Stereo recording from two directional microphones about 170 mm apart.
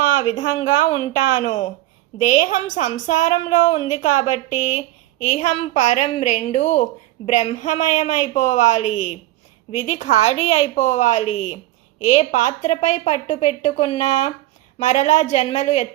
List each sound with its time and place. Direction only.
0.1 s a woman's voice: 45° left (ahead or behind)